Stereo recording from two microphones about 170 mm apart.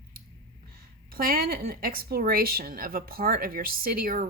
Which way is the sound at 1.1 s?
60° right (ahead or behind).